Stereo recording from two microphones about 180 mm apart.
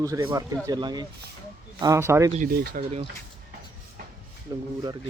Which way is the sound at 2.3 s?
55° right (ahead or behind).